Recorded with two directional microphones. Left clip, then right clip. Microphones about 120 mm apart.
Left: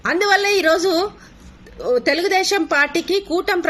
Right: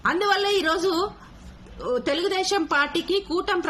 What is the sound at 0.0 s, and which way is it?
Speech, 15° right (ahead or behind).